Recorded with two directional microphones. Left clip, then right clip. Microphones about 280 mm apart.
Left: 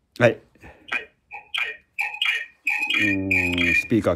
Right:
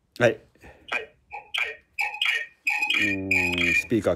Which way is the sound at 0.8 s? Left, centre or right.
Centre.